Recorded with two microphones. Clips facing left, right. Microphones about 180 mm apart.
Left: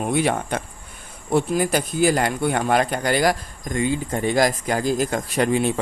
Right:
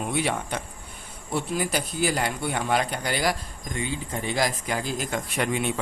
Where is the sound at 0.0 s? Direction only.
50° left (ahead or behind).